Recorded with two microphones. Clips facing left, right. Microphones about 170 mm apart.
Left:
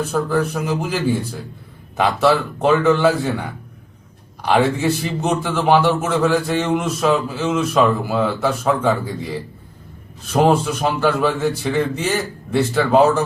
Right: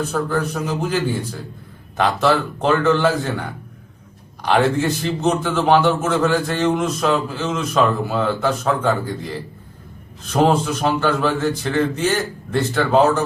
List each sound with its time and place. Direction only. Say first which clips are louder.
0.0 s a man's voice: left 2 dB; 10° left (ahead or behind)